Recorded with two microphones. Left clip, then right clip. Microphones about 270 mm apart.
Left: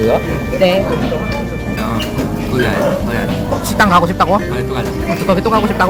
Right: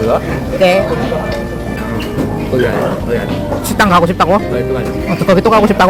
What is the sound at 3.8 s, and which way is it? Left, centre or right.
Speech, centre.